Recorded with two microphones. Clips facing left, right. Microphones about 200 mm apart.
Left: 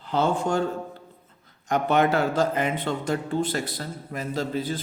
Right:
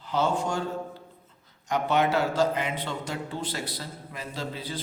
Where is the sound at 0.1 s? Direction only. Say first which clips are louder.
Left 3 dB; 55° left (ahead or behind).